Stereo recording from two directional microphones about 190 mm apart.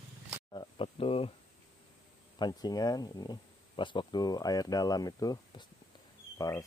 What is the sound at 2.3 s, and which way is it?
Speech, 20° left (ahead or behind).